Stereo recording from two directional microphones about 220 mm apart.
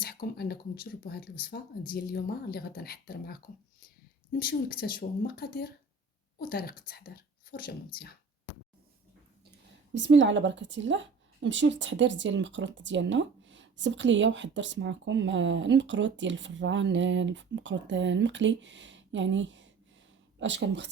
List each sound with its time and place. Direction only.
0.0 s a woman's voice: 45° left (ahead or behind)
9.9 s a woman's voice: 55° right (ahead or behind)